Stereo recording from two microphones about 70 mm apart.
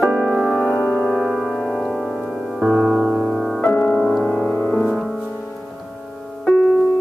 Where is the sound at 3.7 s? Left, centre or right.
Left.